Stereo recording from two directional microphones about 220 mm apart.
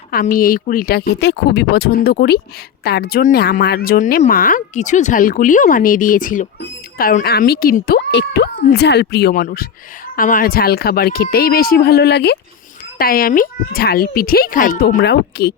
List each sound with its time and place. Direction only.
0.1 s a woman's voice: 40° left (ahead or behind)